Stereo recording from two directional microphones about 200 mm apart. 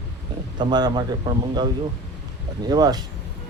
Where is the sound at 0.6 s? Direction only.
20° right (ahead or behind).